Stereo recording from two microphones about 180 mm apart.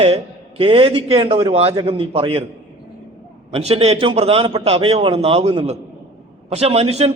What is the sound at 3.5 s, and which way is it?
A man's voice, 35° right (ahead or behind).